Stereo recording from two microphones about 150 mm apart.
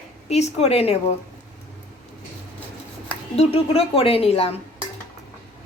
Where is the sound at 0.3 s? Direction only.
45° left (ahead or behind).